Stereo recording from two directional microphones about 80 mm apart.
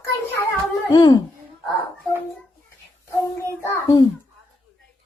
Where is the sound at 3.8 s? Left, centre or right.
Left.